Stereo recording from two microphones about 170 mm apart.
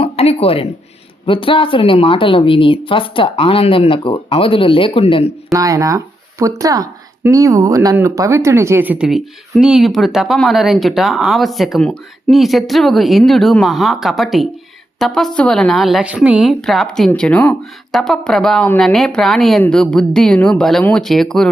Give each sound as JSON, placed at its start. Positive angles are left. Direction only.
{"t": 0.0, "sound": "a woman's voice", "side_deg": 35}
{"t": 5.5, "sound": "speech", "side_deg": -20}